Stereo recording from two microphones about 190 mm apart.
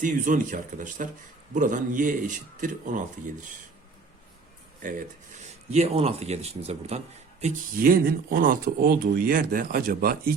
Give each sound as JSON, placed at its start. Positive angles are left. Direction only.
{"t": 0.0, "sound": "speech", "side_deg": -45}
{"t": 4.8, "sound": "speech", "side_deg": -45}
{"t": 5.7, "sound": "speech", "side_deg": -35}
{"t": 7.4, "sound": "speech", "side_deg": -50}